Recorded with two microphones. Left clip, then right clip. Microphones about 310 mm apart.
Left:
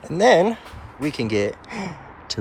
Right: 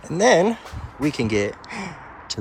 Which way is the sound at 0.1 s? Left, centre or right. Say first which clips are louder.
Left 1 dB; centre.